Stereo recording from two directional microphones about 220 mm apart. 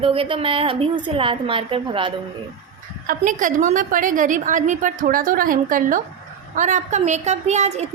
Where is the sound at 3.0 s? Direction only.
35° right (ahead or behind).